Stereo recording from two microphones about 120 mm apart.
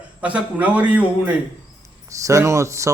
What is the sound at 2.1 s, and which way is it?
Speech, 25° right (ahead or behind).